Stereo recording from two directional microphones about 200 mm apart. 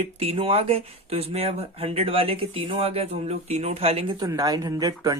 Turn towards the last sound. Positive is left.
turn(degrees=-20)  # may be behind; listen again after turning